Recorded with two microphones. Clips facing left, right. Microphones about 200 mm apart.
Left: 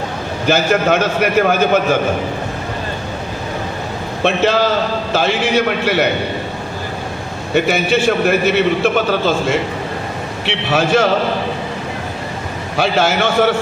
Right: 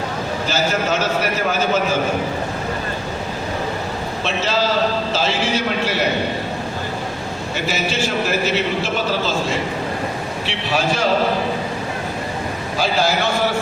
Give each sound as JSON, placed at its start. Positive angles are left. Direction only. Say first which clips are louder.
{"t": 0.4, "sound": "a man's voice", "louder": "left 8 dB", "side_deg": 60}
{"t": 4.2, "sound": "a man's voice", "louder": "left 7 dB", "side_deg": 60}
{"t": 7.5, "sound": "a man's voice", "louder": "left 9 dB", "side_deg": 60}
{"t": 12.7, "sound": "a man's voice", "louder": "left 4 dB", "side_deg": 60}